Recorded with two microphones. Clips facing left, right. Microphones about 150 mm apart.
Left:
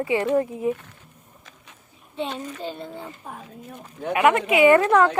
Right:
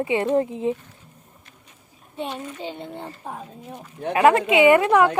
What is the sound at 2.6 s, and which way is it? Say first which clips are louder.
Speech: even; 20° right (ahead or behind).